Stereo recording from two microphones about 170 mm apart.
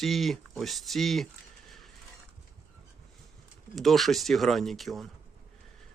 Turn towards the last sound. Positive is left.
turn(degrees=0)  # may be behind; listen again after turning